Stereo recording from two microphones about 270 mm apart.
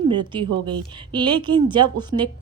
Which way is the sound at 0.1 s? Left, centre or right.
Centre.